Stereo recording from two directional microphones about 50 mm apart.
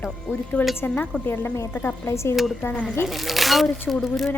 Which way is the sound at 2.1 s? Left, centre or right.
Left.